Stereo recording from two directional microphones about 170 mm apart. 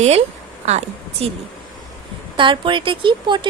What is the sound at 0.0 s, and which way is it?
Speech, 40° right (ahead or behind).